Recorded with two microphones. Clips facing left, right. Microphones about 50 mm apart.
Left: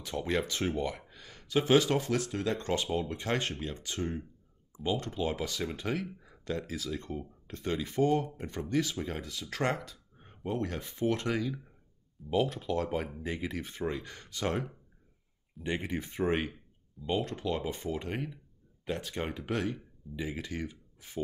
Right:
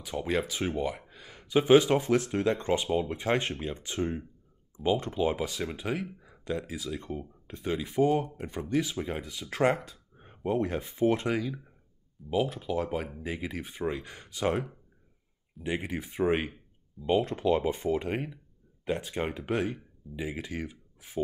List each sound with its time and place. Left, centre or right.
0.0 s speech: centre
11.4 s speech: centre